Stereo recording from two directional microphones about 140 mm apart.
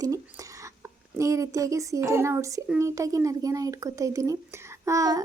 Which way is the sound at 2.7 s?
20° right (ahead or behind).